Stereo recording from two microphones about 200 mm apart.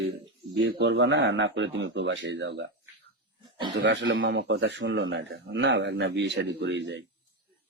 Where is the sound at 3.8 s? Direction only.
65° right (ahead or behind).